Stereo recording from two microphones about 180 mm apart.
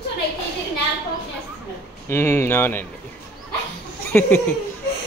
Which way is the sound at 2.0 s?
15° left (ahead or behind).